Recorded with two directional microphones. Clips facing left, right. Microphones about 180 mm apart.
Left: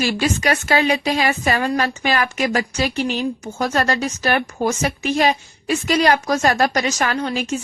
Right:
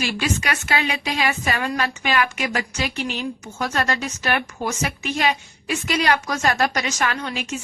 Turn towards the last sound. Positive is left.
turn(degrees=35)  # may be behind; listen again after turning